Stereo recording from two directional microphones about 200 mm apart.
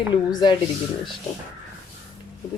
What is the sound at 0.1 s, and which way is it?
Speech, 20° left (ahead or behind).